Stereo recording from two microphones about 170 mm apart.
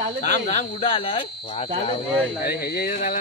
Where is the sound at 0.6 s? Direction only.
35° left (ahead or behind).